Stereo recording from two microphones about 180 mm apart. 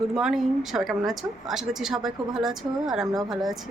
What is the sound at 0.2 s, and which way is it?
Speech, centre (ahead or behind).